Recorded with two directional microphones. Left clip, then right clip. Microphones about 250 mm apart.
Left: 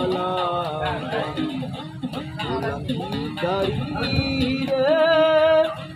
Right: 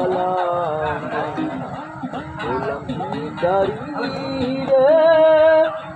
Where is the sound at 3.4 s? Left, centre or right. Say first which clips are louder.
Right 6 dB; left.